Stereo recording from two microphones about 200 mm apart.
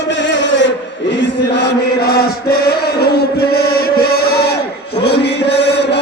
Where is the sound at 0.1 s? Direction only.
65° left (ahead or behind).